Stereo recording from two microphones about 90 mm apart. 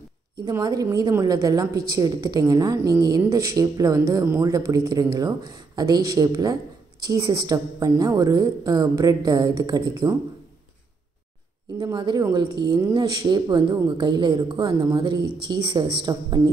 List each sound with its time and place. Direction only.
0.5 s a woman's voice: 45° right (ahead or behind)
11.8 s speech: 55° right (ahead or behind)
14.7 s speech: 40° right (ahead or behind)